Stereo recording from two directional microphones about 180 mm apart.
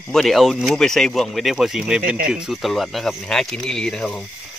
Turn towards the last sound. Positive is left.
turn(degrees=5)  # may be behind; listen again after turning